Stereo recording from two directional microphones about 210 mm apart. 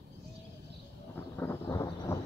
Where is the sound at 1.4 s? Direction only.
10° left (ahead or behind).